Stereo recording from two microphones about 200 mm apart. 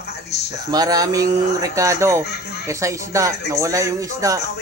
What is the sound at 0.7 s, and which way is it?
Speech, 20° right (ahead or behind).